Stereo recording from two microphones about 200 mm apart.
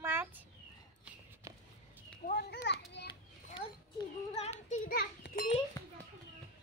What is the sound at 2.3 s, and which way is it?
Children playing, 55° left (ahead or behind).